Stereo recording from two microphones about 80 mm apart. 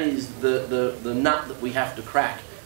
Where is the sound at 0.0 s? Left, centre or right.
Centre.